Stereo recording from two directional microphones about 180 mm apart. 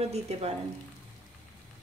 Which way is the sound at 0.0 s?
35° right (ahead or behind).